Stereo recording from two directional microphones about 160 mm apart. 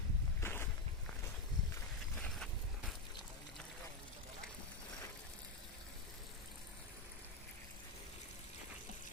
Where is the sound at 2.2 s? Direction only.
5° left (ahead or behind).